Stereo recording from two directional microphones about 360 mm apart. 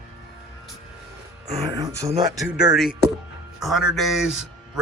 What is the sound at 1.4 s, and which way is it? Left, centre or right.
Speech, centre.